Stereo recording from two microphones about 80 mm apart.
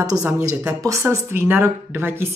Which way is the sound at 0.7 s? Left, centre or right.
Right.